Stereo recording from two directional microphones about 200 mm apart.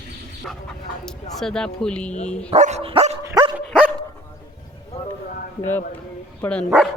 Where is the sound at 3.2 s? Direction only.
20° right (ahead or behind).